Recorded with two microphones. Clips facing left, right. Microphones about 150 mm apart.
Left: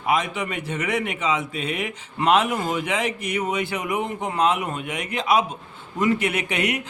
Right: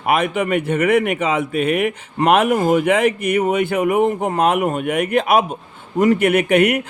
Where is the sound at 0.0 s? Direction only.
60° right (ahead or behind).